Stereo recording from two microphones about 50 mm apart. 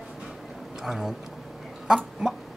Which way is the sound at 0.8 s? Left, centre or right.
Centre.